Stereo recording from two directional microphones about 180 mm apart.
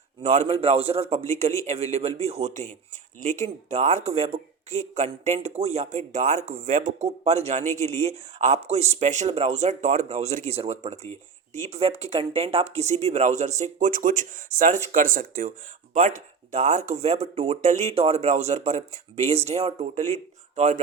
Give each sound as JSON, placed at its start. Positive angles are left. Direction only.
{"t": 0.2, "sound": "speech", "side_deg": -40}